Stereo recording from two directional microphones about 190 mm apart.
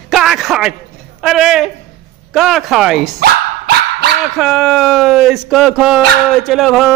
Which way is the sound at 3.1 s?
55° right (ahead or behind).